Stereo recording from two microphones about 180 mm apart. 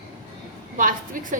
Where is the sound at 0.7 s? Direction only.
50° right (ahead or behind).